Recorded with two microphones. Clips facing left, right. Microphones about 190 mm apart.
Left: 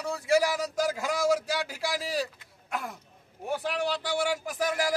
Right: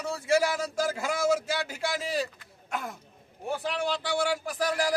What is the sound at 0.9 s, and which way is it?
A man's voice, 5° right (ahead or behind).